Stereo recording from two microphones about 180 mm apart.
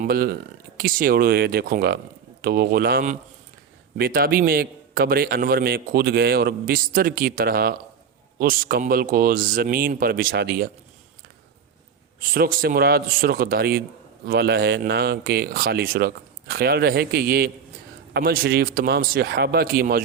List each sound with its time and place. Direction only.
0.0 s a man's voice: 55° right (ahead or behind)
12.3 s a man's voice: 55° right (ahead or behind)